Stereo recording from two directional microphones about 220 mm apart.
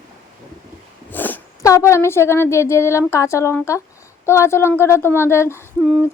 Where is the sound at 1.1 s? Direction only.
10° left (ahead or behind).